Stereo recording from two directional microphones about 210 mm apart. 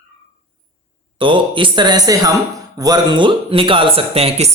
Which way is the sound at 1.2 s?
25° right (ahead or behind).